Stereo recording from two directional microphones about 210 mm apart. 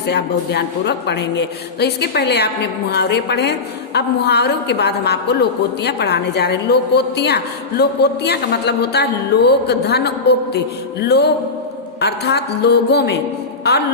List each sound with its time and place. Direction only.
0.1 s a woman's voice: 50° left (ahead or behind)